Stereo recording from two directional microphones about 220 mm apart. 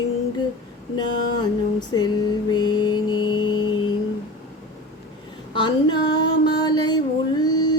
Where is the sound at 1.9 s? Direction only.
20° left (ahead or behind).